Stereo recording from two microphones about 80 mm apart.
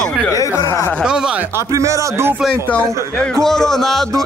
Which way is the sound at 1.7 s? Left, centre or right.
Right.